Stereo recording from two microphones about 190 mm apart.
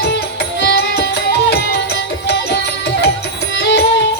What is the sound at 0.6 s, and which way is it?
Music, 65° left (ahead or behind).